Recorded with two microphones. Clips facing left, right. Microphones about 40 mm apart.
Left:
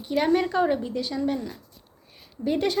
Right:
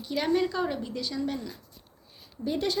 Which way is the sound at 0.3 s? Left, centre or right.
Left.